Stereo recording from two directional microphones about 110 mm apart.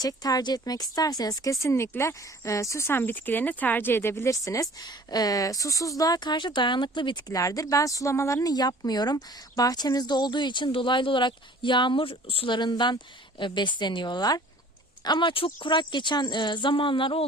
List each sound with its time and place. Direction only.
0.0 s speech: 35° left (ahead or behind)
7.3 s speech: 30° left (ahead or behind); by 17.2 s 50° left (ahead or behind)